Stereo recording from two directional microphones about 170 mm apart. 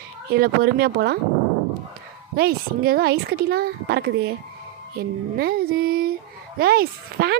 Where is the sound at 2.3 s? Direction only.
65° right (ahead or behind).